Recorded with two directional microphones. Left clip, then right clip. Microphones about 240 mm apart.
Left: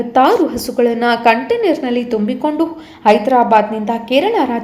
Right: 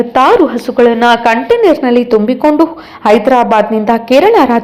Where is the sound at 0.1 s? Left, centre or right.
Centre.